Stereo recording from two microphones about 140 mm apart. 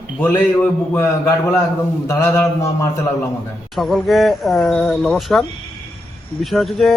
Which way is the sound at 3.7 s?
Centre (ahead or behind).